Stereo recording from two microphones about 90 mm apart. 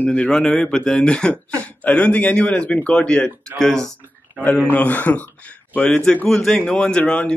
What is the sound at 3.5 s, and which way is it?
Speech, 5° left (ahead or behind).